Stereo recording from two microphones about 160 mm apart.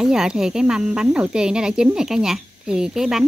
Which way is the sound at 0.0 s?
5° right (ahead or behind).